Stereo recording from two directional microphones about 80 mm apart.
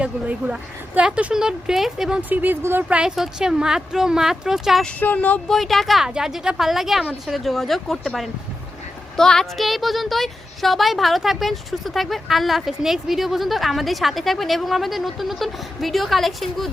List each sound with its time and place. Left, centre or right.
0.0 s speech: centre
2.3 s speech: right
2.6 s speech: right
2.9 s speech: centre
4.9 s speech: left
5.5 s speech: centre